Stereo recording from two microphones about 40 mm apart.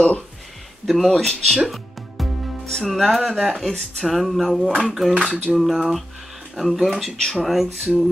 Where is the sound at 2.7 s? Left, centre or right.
Centre.